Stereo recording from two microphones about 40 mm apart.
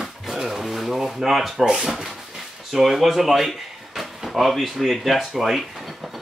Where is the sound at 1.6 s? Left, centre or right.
Centre.